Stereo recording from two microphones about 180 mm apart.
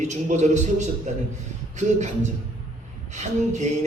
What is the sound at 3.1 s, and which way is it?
Speech, 40° right (ahead or behind).